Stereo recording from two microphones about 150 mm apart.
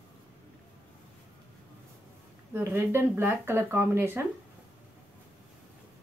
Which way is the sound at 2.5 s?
15° right (ahead or behind).